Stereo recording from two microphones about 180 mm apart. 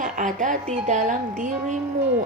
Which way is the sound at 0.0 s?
45° right (ahead or behind).